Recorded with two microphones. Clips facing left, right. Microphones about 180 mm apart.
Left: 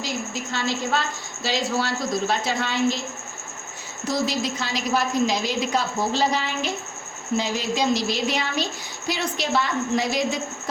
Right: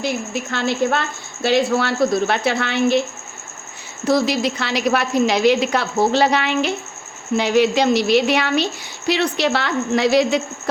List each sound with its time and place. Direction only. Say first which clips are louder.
0.0 s speech: right 6 dB; 60° right (ahead or behind)
4.0 s a woman's voice: right 7 dB; 70° right (ahead or behind)